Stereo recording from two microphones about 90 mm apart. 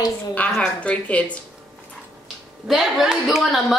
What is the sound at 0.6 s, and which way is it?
Speech, 15° left (ahead or behind).